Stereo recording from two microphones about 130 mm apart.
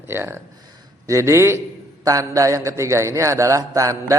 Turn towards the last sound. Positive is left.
turn(degrees=-25)  # may be behind; listen again after turning